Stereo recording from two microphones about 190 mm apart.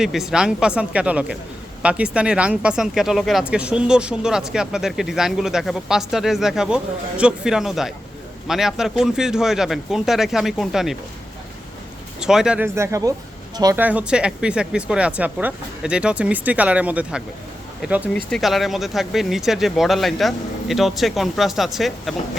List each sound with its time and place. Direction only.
0.0 s speech: centre (ahead or behind)
12.2 s speech: 5° right (ahead or behind); by 13.8 s 20° right (ahead or behind)
13.8 s speech: 5° right (ahead or behind)